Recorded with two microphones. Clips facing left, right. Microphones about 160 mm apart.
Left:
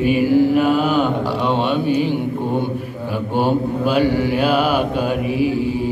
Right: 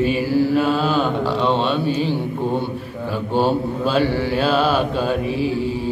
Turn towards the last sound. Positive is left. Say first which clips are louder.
# left 2 dB
turn(degrees=15)  # may be behind; listen again after turning